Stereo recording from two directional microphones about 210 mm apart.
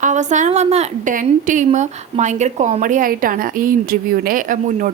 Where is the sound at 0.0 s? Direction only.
35° right (ahead or behind).